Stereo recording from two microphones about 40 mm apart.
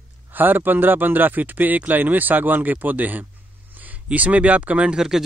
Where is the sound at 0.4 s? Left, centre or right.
Right.